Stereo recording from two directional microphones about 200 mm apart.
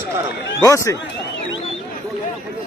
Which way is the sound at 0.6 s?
15° left (ahead or behind).